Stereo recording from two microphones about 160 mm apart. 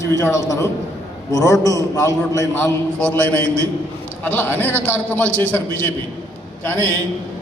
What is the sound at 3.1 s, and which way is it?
A man's voice, 10° left (ahead or behind).